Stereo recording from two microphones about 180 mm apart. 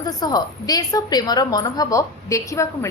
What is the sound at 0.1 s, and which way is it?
A woman's voice, 20° left (ahead or behind).